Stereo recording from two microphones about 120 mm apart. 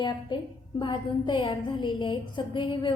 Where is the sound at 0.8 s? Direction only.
40° left (ahead or behind).